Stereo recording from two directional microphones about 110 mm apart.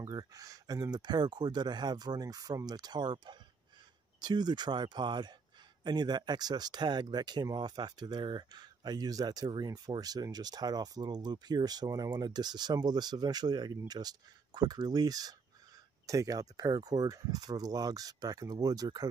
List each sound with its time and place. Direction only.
0.0 s speech: 35° right (ahead or behind)